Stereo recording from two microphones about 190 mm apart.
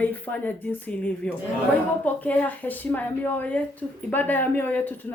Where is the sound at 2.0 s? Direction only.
10° left (ahead or behind).